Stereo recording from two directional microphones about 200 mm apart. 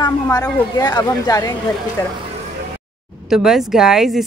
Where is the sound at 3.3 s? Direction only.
Centre (ahead or behind).